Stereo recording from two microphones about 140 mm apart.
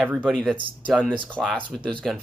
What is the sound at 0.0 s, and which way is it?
Speech, 5° left (ahead or behind).